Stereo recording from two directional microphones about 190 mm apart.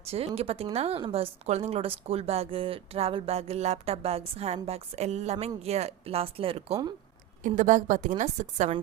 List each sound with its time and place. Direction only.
0.0 s a woman's voice: 30° right (ahead or behind)
7.4 s a woman's voice: 40° right (ahead or behind)